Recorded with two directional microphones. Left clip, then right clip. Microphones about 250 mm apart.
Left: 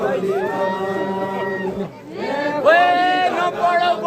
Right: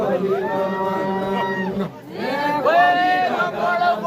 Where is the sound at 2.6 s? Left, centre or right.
Left.